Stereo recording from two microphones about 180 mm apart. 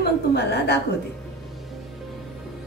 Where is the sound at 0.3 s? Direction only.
65° left (ahead or behind).